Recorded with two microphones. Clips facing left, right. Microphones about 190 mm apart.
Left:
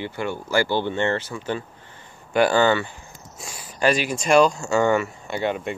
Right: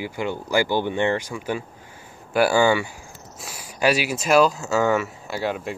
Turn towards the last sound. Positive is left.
turn(degrees=0)  # may be behind; listen again after turning